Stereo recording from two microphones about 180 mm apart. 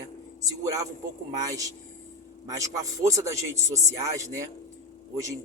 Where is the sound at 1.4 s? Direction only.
20° right (ahead or behind).